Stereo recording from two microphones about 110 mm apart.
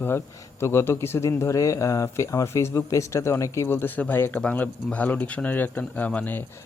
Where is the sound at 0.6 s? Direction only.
25° left (ahead or behind).